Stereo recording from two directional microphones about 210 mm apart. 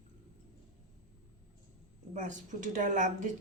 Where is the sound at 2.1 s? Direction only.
35° right (ahead or behind).